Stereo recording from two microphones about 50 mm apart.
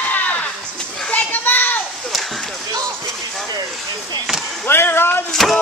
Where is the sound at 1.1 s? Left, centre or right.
Left.